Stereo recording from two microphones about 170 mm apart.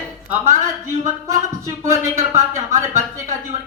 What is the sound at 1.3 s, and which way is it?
Speech, 15° right (ahead or behind).